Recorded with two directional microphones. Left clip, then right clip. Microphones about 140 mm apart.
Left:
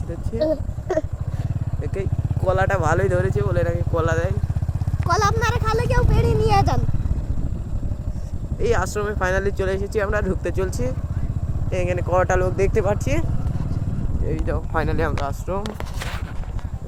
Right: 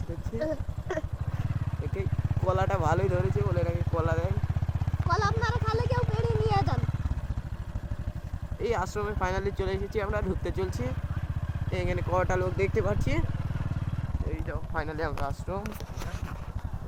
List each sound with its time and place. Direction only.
0.4 s speech: 55° left (ahead or behind)
2.0 s speech: centre (ahead or behind)
3.1 s speech: 20° left (ahead or behind)
5.0 s speech: 50° left (ahead or behind)
8.6 s speech: 10° left (ahead or behind)
10.4 s speech: centre (ahead or behind)
14.7 s speech: 45° left (ahead or behind)
15.2 s speech: 10° left (ahead or behind)